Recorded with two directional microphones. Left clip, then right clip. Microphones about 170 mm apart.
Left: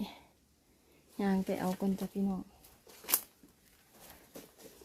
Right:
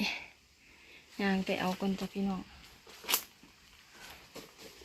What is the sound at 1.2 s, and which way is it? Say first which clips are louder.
Speech: right 2 dB; 20° left (ahead or behind).